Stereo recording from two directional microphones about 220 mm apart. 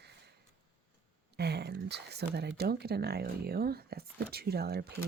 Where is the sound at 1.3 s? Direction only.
50° right (ahead or behind).